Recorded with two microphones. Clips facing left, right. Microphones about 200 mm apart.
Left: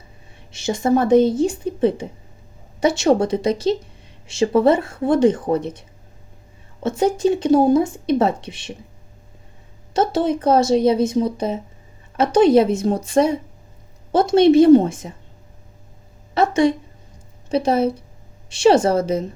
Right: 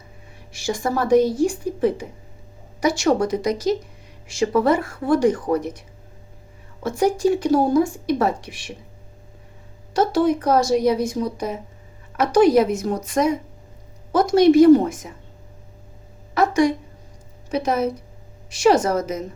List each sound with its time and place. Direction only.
0.5 s a woman's voice: 25° left (ahead or behind)
6.8 s a woman's voice: 25° left (ahead or behind)
9.9 s a woman's voice: 25° left (ahead or behind)
16.3 s a sound: 25° left (ahead or behind)
17.5 s a woman's voice: 30° left (ahead or behind)